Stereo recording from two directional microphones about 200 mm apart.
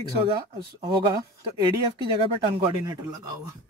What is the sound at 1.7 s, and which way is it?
Speech, 25° right (ahead or behind).